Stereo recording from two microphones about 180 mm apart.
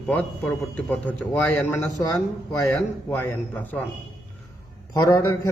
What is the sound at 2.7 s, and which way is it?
A man's voice, 5° left (ahead or behind).